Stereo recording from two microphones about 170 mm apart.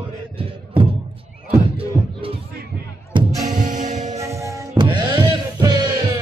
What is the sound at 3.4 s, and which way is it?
Music, 45° right (ahead or behind).